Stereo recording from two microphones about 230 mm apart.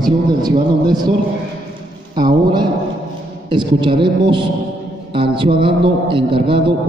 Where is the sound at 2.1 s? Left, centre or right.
Centre.